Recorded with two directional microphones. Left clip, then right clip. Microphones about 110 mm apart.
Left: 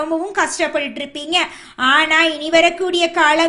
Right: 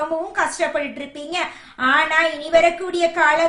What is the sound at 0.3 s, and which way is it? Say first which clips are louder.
A woman's voice: left 2 dB; 30° left (ahead or behind).